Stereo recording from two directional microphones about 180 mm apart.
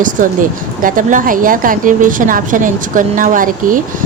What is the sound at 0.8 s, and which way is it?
Speech, 50° right (ahead or behind).